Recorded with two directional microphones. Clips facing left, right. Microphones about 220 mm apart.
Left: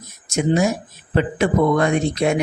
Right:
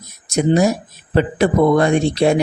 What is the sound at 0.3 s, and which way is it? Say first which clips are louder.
Speech: right 3 dB; 35° right (ahead or behind).